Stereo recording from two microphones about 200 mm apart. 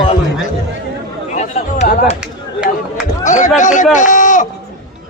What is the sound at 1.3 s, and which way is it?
Speech, 35° left (ahead or behind).